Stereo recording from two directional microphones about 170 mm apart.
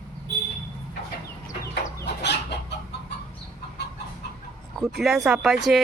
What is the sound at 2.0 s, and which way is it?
Chicken, 85° left.